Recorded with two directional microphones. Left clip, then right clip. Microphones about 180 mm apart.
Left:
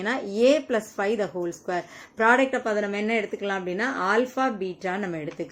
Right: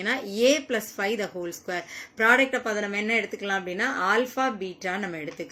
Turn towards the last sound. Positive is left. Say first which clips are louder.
# left 2 dB
turn(degrees=30)  # may be behind; listen again after turning